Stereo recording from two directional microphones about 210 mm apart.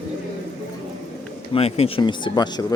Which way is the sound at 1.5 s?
30° left (ahead or behind).